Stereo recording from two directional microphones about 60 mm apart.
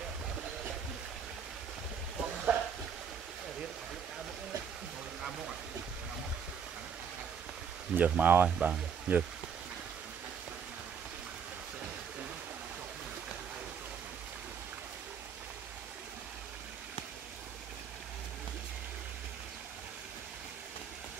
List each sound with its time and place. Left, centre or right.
2.5 s a sound: right
8.0 s speech: right
8.5 s speech: centre